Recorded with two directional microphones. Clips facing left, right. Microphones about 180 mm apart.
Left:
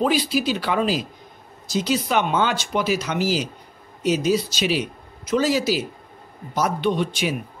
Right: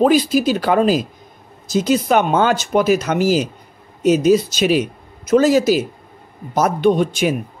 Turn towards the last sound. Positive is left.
turn(degrees=-45)  # may be behind; listen again after turning